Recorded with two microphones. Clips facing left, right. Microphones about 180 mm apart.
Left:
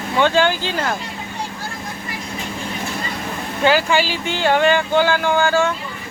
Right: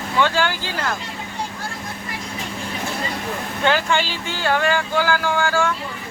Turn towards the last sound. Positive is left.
turn(degrees=20)  # may be behind; listen again after turning